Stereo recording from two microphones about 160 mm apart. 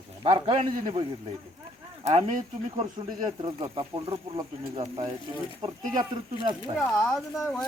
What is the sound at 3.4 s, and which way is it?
Speech, 30° right (ahead or behind).